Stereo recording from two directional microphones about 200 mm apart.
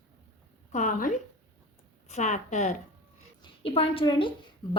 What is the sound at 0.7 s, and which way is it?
A woman's voice, 40° left (ahead or behind).